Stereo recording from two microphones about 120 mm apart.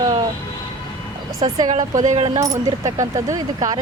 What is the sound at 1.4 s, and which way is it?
Speech, 35° right (ahead or behind).